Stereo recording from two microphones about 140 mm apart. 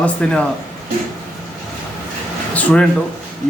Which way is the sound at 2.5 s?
10° left (ahead or behind).